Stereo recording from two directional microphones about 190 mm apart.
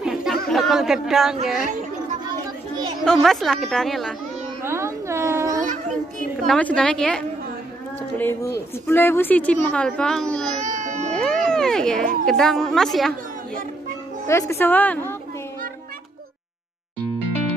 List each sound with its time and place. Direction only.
0.0 s chatter: centre (ahead or behind)
0.5 s a woman's voice: centre (ahead or behind)
2.2 s children playing: 25° right (ahead or behind)
3.0 s a woman's voice: centre (ahead or behind)
4.6 s a sound: 15° right (ahead or behind)
5.6 s children playing: 45° right (ahead or behind)
6.4 s a woman's voice: 5° left (ahead or behind)
10.6 s a sound: 40° right (ahead or behind)
11.1 s music: 5° left (ahead or behind)
12.3 s a woman's voice: centre (ahead or behind)
14.2 s speech: 15° left (ahead or behind)